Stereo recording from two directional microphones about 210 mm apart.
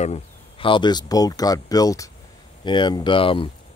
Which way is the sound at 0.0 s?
30° left (ahead or behind).